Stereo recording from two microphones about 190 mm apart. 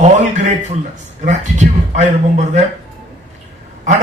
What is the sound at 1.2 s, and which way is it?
A man's voice, 40° right (ahead or behind).